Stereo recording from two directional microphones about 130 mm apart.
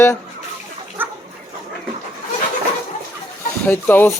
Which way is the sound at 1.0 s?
15° right (ahead or behind).